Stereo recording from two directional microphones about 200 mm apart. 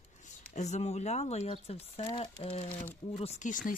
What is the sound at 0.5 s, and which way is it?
Speech, 35° left (ahead or behind).